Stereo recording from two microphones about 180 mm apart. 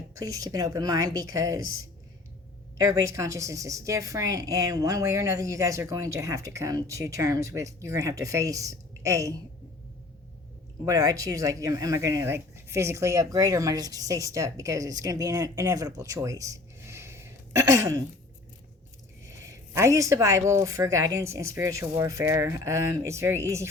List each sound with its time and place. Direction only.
0.2 s speech: 20° right (ahead or behind)
2.7 s a woman's voice: 20° right (ahead or behind)
10.8 s speech: 20° right (ahead or behind)
19.3 s a sound: 15° right (ahead or behind)
20.5 s a woman's voice: 15° right (ahead or behind)